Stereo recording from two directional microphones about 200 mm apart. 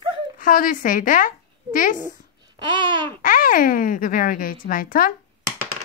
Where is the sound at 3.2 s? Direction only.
45° left (ahead or behind).